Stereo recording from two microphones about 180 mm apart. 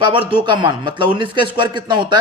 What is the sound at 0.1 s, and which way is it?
A man's voice, 30° right (ahead or behind).